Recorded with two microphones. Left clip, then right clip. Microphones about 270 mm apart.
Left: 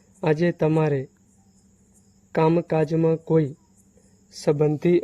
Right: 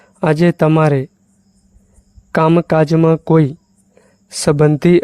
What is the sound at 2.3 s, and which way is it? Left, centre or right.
Speech, right.